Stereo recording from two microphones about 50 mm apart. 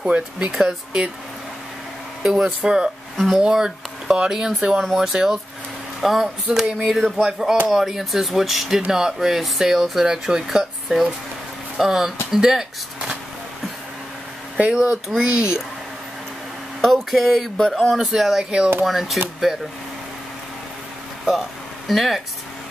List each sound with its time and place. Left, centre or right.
0.5 s speech: centre
2.4 s speech: centre
3.2 s speech: centre
3.4 s speech: centre
14.7 s speech: centre
16.8 s speech: centre
18.0 s speech: centre
18.4 s speech: centre
18.9 s speech: centre
19.5 s speech: centre
21.3 s speech: centre